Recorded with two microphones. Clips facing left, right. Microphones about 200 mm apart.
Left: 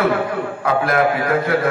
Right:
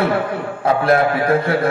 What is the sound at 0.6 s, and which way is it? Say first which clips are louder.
Speech: right 4 dB; 30° right (ahead or behind).